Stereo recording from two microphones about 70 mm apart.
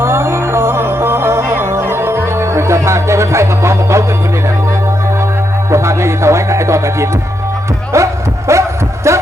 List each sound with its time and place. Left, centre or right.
0.0 s music: right
5.7 s music: right
7.9 s a sound: right